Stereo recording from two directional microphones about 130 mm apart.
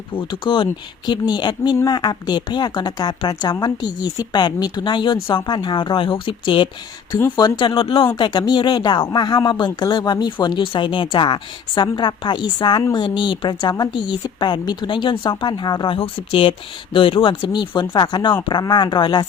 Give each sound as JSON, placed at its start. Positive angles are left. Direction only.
{"t": 0.1, "sound": "speech", "side_deg": 40}
{"t": 7.1, "sound": "speech", "side_deg": 30}